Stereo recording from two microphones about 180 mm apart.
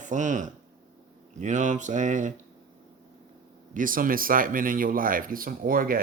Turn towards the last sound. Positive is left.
turn(degrees=-50)  # may be behind; listen again after turning